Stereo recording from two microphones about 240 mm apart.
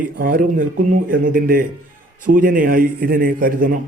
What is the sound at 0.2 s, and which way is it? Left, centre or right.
A man's voice, right.